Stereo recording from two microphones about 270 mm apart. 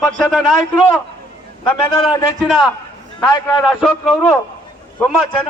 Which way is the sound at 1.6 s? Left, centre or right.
Centre.